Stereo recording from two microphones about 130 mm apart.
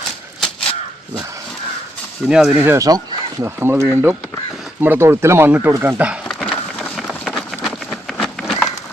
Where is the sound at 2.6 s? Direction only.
25° right (ahead or behind).